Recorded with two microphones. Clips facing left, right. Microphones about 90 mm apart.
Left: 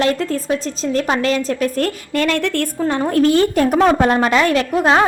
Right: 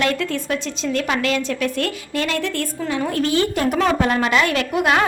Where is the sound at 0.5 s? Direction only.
35° left (ahead or behind).